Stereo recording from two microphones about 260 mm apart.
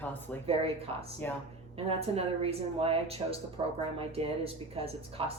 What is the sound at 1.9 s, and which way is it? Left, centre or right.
Speech, right.